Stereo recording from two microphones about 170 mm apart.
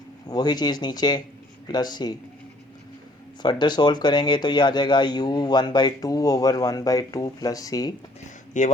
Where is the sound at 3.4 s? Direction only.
25° left (ahead or behind).